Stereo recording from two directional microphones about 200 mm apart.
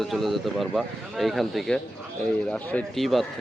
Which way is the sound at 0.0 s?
Centre (ahead or behind).